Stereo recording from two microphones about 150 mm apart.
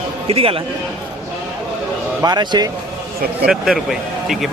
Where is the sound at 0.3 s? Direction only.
40° right (ahead or behind).